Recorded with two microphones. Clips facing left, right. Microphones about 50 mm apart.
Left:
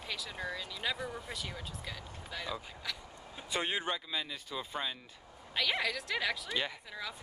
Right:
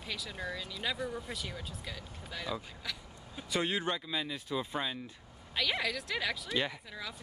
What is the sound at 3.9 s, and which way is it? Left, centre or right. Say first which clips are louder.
Speech: right 2 dB; centre.